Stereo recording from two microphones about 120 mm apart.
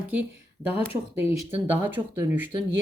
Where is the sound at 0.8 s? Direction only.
20° right (ahead or behind).